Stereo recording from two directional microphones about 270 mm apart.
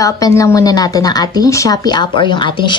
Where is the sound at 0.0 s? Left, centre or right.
Centre.